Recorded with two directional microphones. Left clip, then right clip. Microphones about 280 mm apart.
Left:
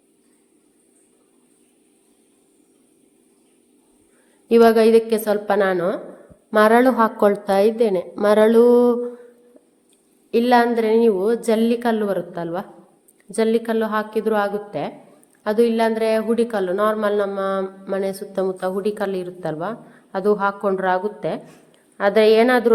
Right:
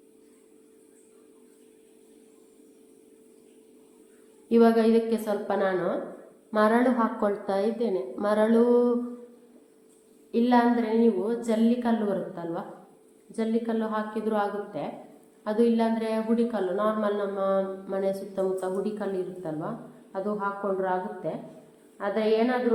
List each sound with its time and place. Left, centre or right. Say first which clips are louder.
4.4 s a woman's voice: left 8 dB; left
10.3 s a woman's voice: left 7 dB; left